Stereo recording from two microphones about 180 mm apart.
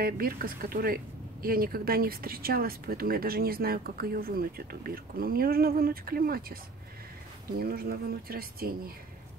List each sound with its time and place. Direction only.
0.0 s speech: 55° right (ahead or behind)